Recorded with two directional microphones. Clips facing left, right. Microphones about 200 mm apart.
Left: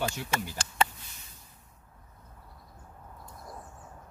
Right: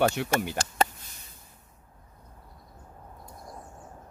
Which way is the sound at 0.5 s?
40° right (ahead or behind).